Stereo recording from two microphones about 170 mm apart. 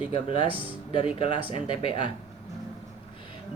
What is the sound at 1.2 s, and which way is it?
Speech, 35° left (ahead or behind).